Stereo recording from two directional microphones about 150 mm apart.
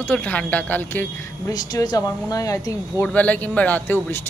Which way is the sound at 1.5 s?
25° left (ahead or behind).